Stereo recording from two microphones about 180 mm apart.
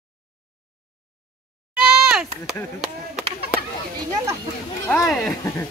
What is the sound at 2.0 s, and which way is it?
Speech, 5° right (ahead or behind).